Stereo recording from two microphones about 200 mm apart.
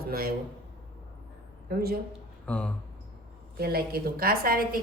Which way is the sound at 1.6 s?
50° right (ahead or behind).